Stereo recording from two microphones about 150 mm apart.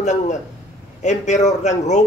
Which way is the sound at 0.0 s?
50° left (ahead or behind).